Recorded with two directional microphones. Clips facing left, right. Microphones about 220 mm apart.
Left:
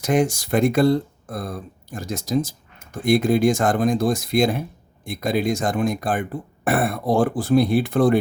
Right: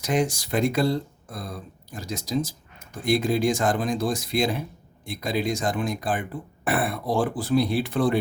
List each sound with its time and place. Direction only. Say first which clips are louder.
0.0 s speech: left 4 dB; 50° left (ahead or behind)